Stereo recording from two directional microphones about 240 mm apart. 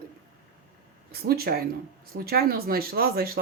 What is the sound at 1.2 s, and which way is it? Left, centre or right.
Speech, right.